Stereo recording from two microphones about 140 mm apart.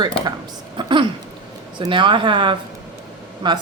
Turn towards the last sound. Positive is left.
turn(degrees=-30)  # may be behind; listen again after turning